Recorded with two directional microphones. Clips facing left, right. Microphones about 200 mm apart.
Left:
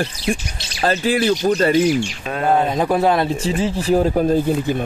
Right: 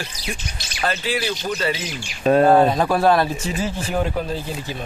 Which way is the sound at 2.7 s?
20° left (ahead or behind).